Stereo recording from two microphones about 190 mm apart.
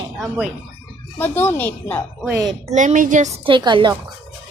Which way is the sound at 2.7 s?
40° right (ahead or behind).